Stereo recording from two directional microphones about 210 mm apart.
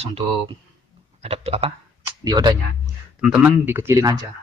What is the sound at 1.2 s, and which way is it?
Speech, 30° right (ahead or behind).